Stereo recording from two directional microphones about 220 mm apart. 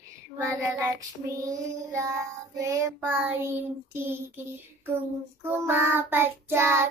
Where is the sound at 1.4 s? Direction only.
15° right (ahead or behind).